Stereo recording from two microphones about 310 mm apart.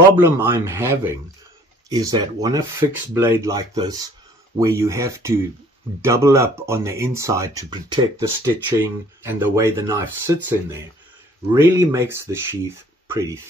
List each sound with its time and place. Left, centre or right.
0.1 s speech: centre